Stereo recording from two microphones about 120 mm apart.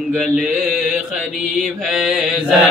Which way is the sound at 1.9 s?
Centre (ahead or behind).